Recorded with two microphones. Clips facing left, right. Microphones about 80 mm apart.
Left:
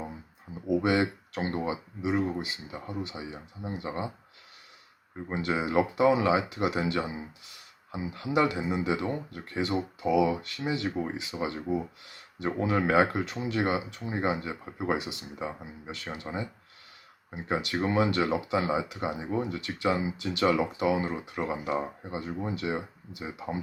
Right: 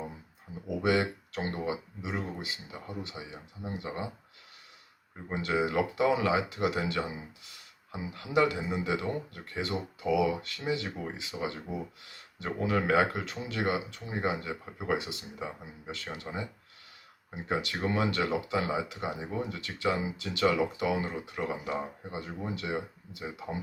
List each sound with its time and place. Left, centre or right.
0.8 s speech: left
5.3 s speech: left